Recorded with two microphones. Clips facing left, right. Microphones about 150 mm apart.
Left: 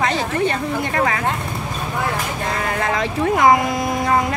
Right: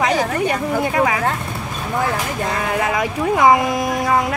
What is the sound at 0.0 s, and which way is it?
Speech, 10° right (ahead or behind).